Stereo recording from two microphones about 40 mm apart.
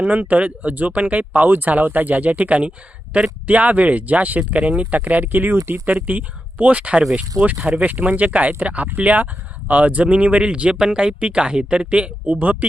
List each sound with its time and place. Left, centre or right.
0.0 s speech: right
3.4 s speech: right
5.8 s speech: right